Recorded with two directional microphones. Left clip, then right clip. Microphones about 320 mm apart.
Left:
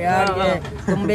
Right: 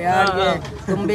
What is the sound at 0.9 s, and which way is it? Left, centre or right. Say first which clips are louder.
Speech: even; centre.